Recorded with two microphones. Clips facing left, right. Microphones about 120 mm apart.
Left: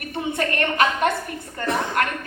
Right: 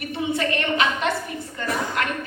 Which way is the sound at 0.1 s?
50° left (ahead or behind).